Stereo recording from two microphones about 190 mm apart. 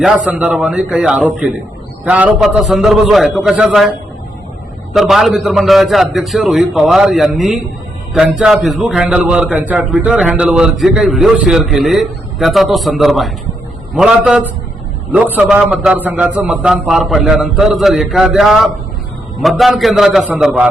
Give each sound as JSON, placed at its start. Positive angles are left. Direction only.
{"t": 0.3, "sound": "a man's voice", "side_deg": -5}
{"t": 4.9, "sound": "a man's voice", "side_deg": 0}